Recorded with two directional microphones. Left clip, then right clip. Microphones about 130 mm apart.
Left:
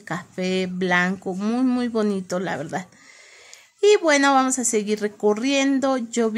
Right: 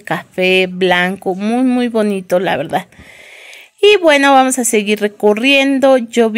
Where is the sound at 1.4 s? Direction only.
10° right (ahead or behind).